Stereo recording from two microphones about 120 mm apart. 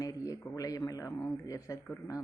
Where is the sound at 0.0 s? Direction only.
30° left (ahead or behind).